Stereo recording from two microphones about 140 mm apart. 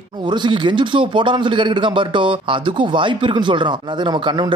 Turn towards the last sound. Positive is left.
turn(degrees=-30)  # may be behind; listen again after turning